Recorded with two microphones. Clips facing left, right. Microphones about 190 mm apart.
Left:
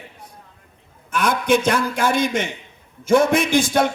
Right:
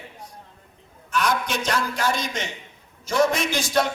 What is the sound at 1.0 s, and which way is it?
A man's voice, 55° left (ahead or behind).